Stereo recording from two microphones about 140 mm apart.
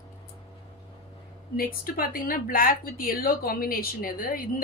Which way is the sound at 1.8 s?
90° left.